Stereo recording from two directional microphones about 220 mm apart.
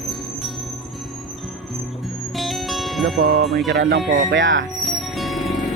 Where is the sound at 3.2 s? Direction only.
40° right (ahead or behind).